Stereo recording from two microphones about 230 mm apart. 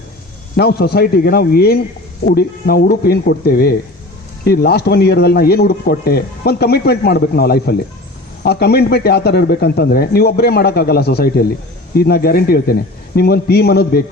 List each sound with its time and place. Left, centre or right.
0.5 s speech: left